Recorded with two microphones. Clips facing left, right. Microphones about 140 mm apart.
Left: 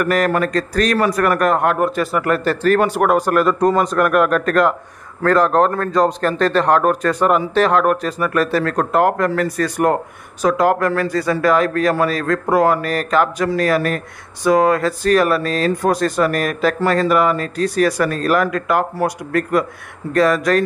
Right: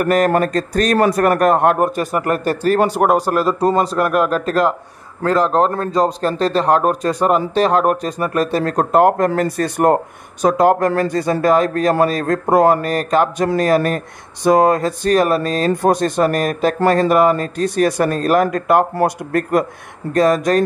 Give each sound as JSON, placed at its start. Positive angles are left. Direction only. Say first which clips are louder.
{"t": 0.0, "sound": "a man's voice", "louder": "right 2 dB", "side_deg": -35}
{"t": 11.1, "sound": "speech", "louder": "right 1 dB", "side_deg": -20}
{"t": 11.3, "sound": "a man's voice", "louder": "right 1 dB", "side_deg": -40}
{"t": 15.9, "sound": "speech", "louder": "right 2 dB", "side_deg": -25}
{"t": 16.3, "sound": "a man's voice", "louder": "right 1 dB", "side_deg": -40}
{"t": 20.1, "sound": "a man's voice", "louder": "right 1 dB", "side_deg": -40}